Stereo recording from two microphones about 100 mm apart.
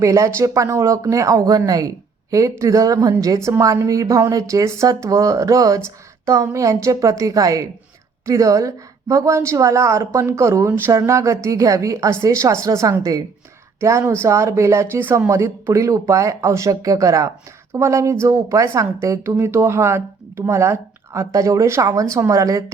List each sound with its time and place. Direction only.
0.0 s a woman's voice: 30° right (ahead or behind)